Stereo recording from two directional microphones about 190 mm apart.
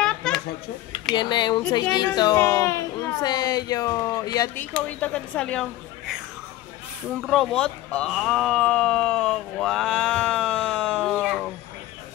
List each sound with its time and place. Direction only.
0.0 s a sound: 5° left (ahead or behind)
1.1 s a woman's voice: 25° left (ahead or behind)
4.8 s speech: 5° left (ahead or behind)
7.2 s speech: centre (ahead or behind)